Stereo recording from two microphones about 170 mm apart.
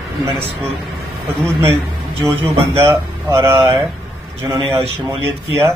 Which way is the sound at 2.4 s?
15° right (ahead or behind).